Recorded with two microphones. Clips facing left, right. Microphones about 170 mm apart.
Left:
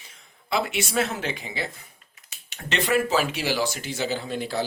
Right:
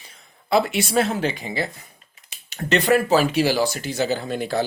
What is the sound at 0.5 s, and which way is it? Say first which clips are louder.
Speech: right 6 dB; 35° right (ahead or behind).